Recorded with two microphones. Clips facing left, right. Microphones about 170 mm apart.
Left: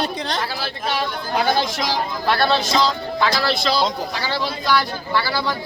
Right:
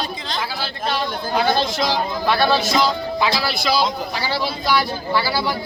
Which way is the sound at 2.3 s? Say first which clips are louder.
Right 1 dB; 5° right (ahead or behind).